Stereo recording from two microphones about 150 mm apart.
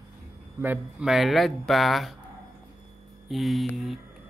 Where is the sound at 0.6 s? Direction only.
10° right (ahead or behind).